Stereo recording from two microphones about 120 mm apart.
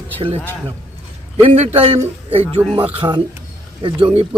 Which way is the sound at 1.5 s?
50° right (ahead or behind).